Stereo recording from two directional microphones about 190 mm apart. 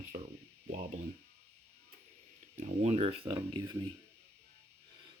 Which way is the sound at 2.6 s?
35° right (ahead or behind).